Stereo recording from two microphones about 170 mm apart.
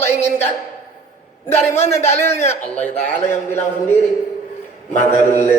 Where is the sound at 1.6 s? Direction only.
15° left (ahead or behind).